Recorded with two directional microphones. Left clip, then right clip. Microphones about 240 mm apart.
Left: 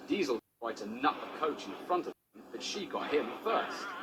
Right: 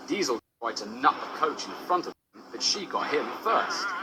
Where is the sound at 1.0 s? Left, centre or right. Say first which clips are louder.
Right 8 dB; right.